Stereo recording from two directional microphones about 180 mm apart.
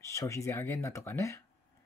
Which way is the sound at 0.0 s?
15° left (ahead or behind).